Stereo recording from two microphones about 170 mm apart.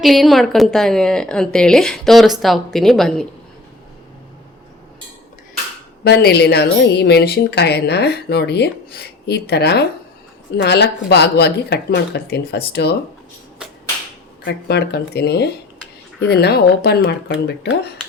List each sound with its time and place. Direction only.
0.0 s a woman's voice: centre (ahead or behind)
6.1 s speech: 75° left (ahead or behind)
14.4 s speech: 75° left (ahead or behind)